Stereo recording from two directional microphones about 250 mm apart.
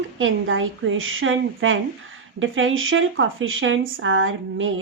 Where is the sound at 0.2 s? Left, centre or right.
Right.